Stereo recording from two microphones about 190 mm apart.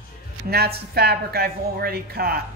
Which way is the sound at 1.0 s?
55° right (ahead or behind).